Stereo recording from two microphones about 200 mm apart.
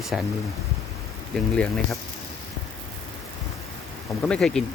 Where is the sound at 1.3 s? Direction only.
5° left (ahead or behind).